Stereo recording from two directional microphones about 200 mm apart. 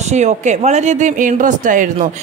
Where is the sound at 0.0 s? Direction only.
35° right (ahead or behind).